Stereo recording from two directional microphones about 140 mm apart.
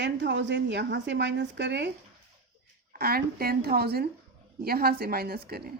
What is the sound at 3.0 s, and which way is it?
Speech, 90° right.